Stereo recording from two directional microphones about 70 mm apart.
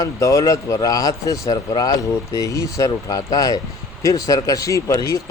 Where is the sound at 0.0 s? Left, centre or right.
Left.